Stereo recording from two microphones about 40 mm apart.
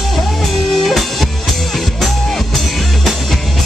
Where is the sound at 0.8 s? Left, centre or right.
Centre.